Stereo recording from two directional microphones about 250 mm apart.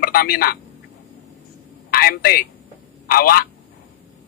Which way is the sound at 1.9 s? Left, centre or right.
Left.